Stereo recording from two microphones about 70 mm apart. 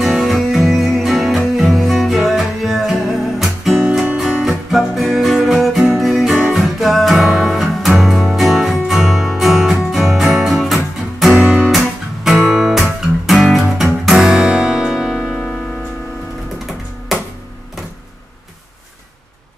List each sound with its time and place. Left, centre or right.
0.0 s music: centre
4.2 s guitar: centre
11.3 s music: centre
11.7 s music: centre
15.1 s music: centre